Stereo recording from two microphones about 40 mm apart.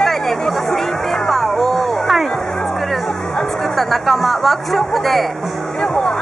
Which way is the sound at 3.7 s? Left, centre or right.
Centre.